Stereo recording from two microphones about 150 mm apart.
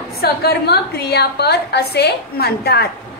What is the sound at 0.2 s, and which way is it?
A woman's voice, 90° left.